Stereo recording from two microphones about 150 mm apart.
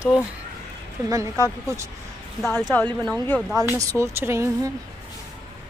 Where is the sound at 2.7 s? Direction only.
10° left (ahead or behind).